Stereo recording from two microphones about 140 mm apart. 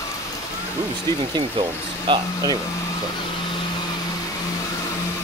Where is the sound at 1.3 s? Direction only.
35° right (ahead or behind).